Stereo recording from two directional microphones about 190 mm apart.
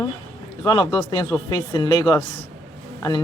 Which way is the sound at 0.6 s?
25° left (ahead or behind).